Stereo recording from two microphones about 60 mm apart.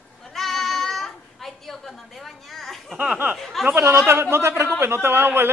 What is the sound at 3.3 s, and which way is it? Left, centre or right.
Speech, centre.